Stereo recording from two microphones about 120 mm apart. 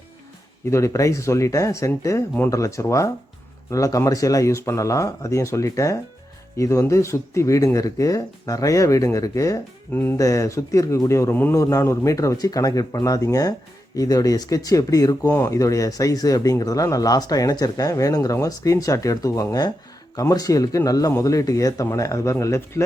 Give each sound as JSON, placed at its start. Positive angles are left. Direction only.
{"t": 0.7, "sound": "speech", "side_deg": 25}